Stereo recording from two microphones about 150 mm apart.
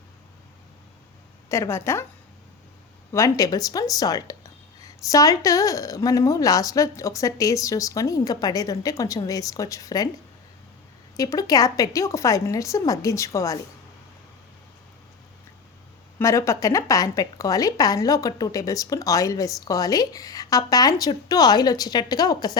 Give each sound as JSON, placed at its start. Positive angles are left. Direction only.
{"t": 1.5, "sound": "a woman's voice", "side_deg": 20}
{"t": 3.1, "sound": "speech", "side_deg": 20}
{"t": 11.2, "sound": "speech", "side_deg": 25}
{"t": 16.1, "sound": "speech", "side_deg": 20}